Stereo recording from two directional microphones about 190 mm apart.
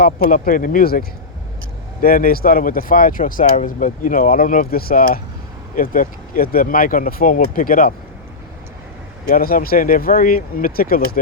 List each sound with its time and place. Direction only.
0.0 s speech: 50° left (ahead or behind)
9.3 s speech: 50° left (ahead or behind)